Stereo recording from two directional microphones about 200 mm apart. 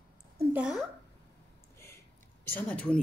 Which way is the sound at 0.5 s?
5° right (ahead or behind).